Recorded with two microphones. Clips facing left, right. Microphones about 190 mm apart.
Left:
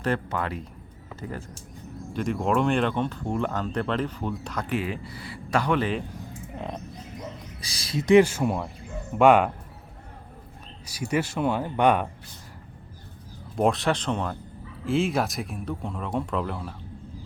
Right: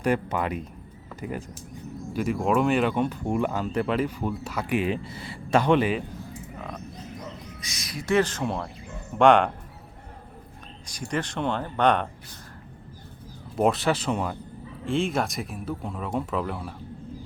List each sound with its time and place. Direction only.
0.0 s speech: 15° right (ahead or behind)
4.8 s speech: 20° right (ahead or behind)
6.6 s speech: 25° left (ahead or behind)
7.6 s a sound: 30° left (ahead or behind)
8.0 s speech: 15° left (ahead or behind)
10.8 s speech: 10° left (ahead or behind)
13.6 s speech: centre (ahead or behind)